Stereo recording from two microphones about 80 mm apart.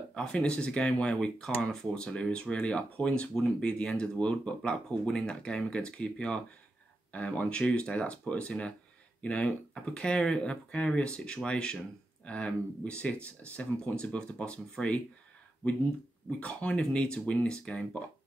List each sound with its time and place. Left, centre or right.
0.1 s speech: centre
16.3 s speech: centre